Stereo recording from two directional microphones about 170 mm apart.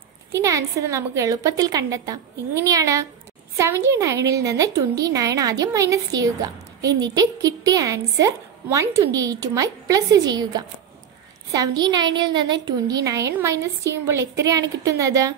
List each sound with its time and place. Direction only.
0.3 s a woman's voice: 20° right (ahead or behind)